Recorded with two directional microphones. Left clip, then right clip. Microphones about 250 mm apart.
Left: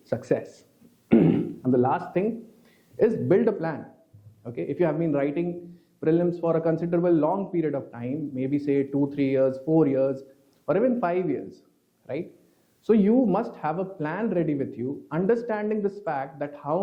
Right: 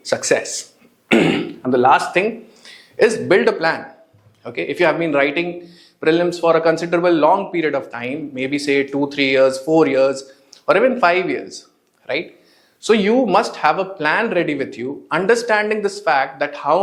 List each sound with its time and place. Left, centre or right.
0.0 s speech: centre